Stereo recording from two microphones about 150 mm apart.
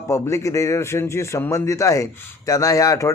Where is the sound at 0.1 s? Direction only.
20° left (ahead or behind).